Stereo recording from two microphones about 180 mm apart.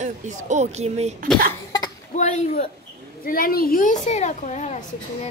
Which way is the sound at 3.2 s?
55° left (ahead or behind).